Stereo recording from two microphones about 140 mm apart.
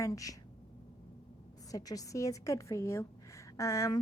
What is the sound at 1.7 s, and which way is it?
Speech, 25° left (ahead or behind).